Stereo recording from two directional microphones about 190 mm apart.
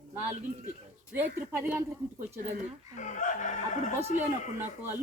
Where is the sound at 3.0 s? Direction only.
40° left (ahead or behind).